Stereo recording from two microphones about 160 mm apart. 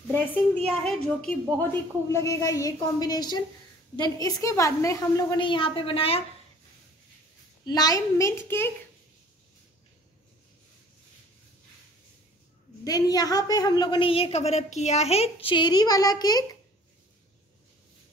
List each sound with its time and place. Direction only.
0.7 s a woman's voice: 5° left (ahead or behind)
1.6 s a woman's voice: 20° left (ahead or behind); by 6.2 s 35° left (ahead or behind)
7.6 s a woman's voice: 25° left (ahead or behind)
12.8 s a woman's voice: 25° left (ahead or behind)